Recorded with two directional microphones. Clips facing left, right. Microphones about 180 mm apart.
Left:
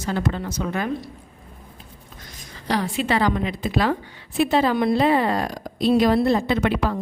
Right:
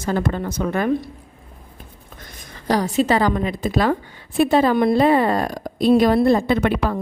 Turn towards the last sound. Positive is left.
turn(degrees=-55)  # may be behind; listen again after turning